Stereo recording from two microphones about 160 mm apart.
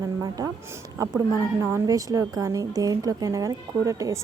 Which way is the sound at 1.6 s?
20° right (ahead or behind).